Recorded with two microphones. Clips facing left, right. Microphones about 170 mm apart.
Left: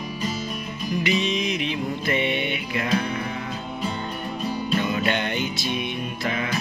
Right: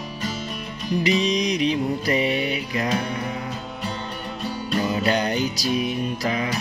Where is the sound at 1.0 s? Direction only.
35° right (ahead or behind).